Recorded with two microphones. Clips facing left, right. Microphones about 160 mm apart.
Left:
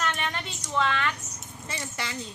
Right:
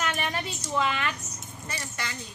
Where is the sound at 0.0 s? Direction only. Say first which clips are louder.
Right 1 dB; 10° right (ahead or behind).